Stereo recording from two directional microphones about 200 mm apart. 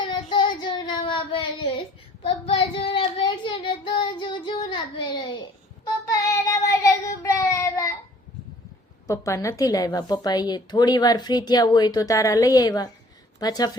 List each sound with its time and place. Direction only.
0.0 s child singing: 25° left (ahead or behind)
9.0 s a woman's voice: 15° left (ahead or behind)